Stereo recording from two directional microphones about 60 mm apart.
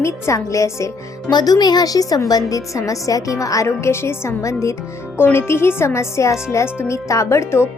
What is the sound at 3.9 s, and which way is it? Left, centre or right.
Speech, left.